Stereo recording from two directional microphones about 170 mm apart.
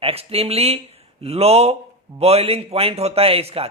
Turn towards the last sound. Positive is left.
turn(degrees=-35)  # may be behind; listen again after turning